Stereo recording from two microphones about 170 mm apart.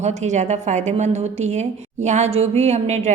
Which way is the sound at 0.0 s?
45° right (ahead or behind).